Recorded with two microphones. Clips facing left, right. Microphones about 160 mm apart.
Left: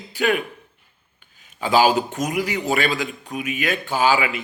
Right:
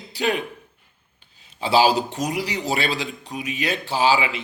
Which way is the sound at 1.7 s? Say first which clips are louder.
Left 1 dB; 35° right (ahead or behind).